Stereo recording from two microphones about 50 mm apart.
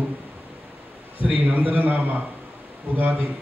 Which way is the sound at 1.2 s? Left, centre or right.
Right.